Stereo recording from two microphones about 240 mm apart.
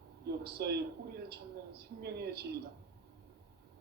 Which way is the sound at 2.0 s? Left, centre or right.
Right.